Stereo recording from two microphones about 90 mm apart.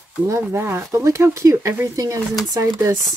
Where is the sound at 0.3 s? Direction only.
30° right (ahead or behind).